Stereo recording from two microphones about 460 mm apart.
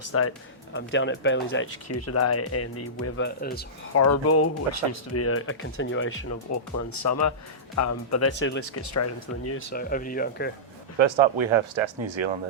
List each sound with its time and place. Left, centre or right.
0.0 s speech: left
3.9 s speech: left
8.8 s speech: left; by 10.5 s centre
10.9 s speech: right